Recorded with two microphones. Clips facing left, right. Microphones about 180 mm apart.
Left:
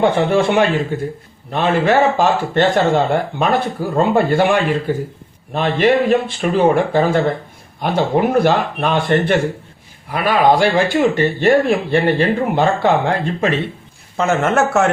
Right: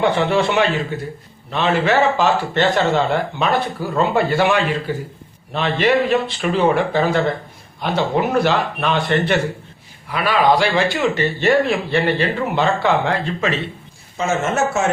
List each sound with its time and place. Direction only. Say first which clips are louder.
0.0 s speech: left 3 dB; 50° left (ahead or behind)
14.2 s speech: left 4 dB; 60° left (ahead or behind)